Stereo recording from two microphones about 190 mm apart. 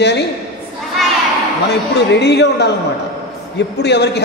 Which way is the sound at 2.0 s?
65° left (ahead or behind).